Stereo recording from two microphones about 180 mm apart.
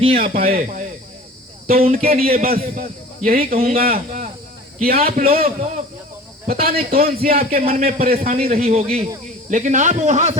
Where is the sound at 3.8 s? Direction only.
55° right (ahead or behind).